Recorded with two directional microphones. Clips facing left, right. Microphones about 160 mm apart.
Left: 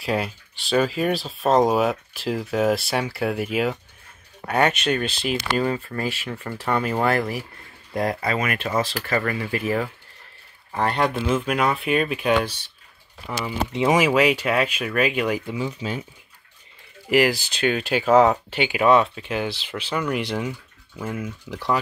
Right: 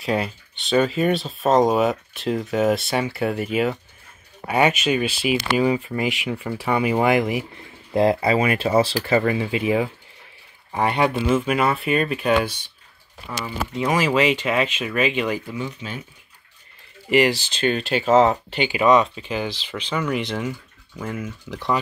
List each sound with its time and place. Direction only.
0.0 s speech: centre (ahead or behind)
13.7 s speech: 15° left (ahead or behind)
15.4 s speech: 25° left (ahead or behind)
17.1 s speech: 5° left (ahead or behind)